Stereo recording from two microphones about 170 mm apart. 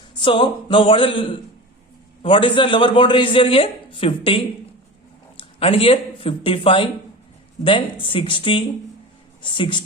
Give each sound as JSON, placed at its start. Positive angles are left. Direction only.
{"t": 0.2, "sound": "speech", "side_deg": 30}